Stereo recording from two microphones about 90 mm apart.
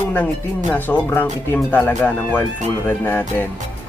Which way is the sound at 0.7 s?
20° left (ahead or behind).